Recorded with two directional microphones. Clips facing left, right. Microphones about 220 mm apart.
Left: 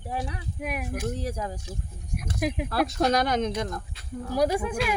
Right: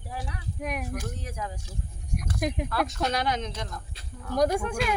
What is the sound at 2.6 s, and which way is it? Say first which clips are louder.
Speech: left 4 dB; 35° left (ahead or behind).